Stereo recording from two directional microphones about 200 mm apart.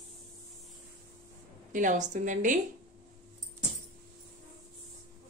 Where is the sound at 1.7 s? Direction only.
40° right (ahead or behind).